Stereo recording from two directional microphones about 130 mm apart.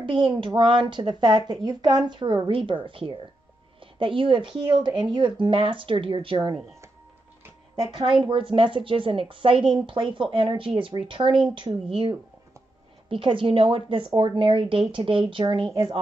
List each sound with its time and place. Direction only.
0.0 s speech: 40° right (ahead or behind)
8.2 s speech: 40° right (ahead or behind)